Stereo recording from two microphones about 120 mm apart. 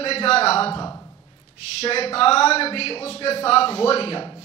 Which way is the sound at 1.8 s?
55° left (ahead or behind).